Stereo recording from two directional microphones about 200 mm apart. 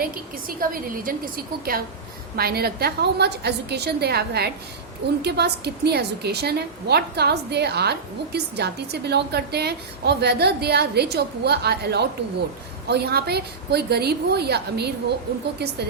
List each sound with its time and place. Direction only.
0.0 s a woman's voice: 45° right (ahead or behind)